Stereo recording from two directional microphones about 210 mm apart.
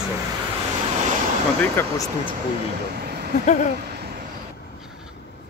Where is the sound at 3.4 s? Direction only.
35° left (ahead or behind).